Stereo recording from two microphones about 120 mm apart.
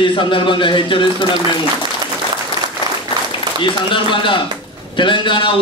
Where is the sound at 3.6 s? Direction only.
45° left (ahead or behind).